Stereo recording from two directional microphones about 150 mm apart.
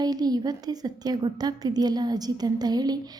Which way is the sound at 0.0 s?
25° right (ahead or behind).